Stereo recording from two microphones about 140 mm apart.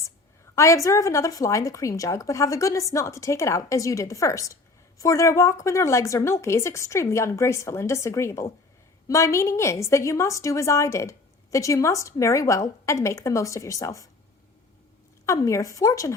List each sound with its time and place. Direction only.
0.5 s a woman's voice: 20° left (ahead or behind)
15.3 s a woman's voice: 20° left (ahead or behind)